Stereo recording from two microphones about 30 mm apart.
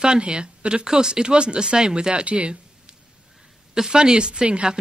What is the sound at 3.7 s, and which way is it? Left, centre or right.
Speech, right.